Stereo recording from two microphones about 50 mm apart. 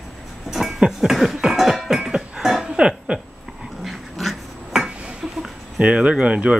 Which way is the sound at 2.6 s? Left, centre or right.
Centre.